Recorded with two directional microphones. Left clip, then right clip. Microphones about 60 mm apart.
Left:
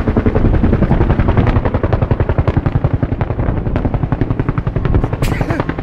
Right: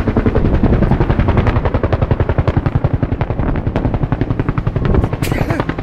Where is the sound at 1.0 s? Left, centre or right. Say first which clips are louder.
Even; centre.